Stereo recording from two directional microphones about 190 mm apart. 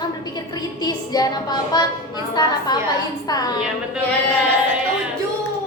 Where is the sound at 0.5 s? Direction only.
20° left (ahead or behind).